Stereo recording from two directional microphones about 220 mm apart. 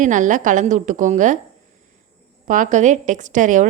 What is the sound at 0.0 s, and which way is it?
A woman's voice, 35° right (ahead or behind).